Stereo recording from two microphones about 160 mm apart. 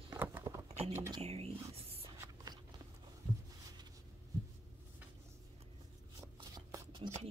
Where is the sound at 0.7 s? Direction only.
40° right (ahead or behind).